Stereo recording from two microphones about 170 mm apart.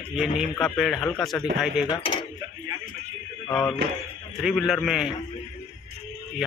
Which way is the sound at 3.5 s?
5° left (ahead or behind).